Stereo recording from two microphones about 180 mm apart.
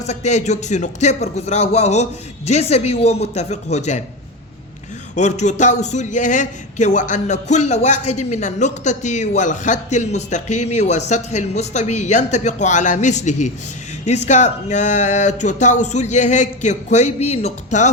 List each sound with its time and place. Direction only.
0.0 s a man's voice: 40° left (ahead or behind)
5.1 s a man's voice: 40° left (ahead or behind)